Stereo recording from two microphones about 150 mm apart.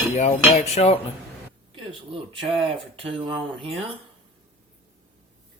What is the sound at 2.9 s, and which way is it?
Speech, 35° right (ahead or behind).